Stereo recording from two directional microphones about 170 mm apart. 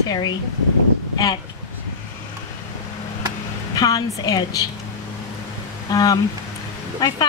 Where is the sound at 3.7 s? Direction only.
20° left (ahead or behind).